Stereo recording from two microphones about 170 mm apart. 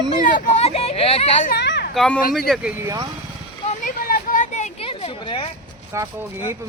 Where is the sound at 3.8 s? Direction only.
55° left (ahead or behind); by 5.5 s 30° left (ahead or behind).